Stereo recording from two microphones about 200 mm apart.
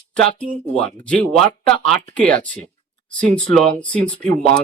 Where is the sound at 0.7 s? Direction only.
5° left (ahead or behind).